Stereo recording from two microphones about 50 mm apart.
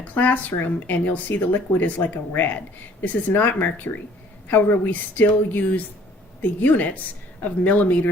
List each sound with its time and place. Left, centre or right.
0.0 s speech: left